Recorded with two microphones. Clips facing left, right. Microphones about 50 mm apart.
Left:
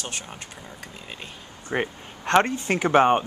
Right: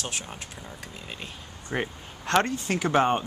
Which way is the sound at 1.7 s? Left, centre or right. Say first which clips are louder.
Left 3 dB; centre.